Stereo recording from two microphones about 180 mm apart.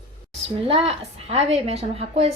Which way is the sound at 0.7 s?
35° right (ahead or behind).